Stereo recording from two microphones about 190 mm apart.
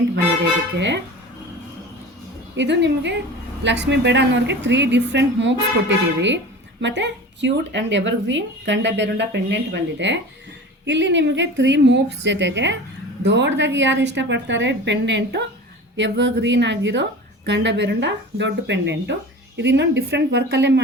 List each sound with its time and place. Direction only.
0.8 s speech: 70° right (ahead or behind)
2.6 s speech: 65° right (ahead or behind)